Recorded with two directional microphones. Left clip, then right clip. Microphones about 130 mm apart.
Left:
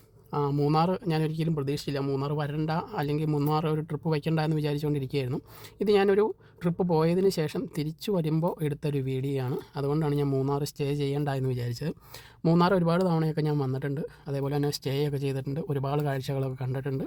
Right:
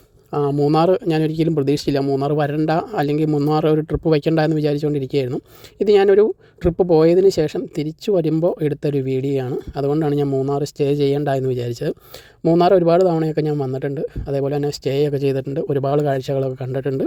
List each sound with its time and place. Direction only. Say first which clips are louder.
0.7 s speech: right 11 dB; 45° right (ahead or behind)
3.2 s a man's voice: right 10 dB; 20° right (ahead or behind)
3.5 s speech: right 12 dB; 45° right (ahead or behind)
10.4 s speech: right 10 dB; 30° right (ahead or behind)
12.5 s speech: right 12 dB; 30° right (ahead or behind)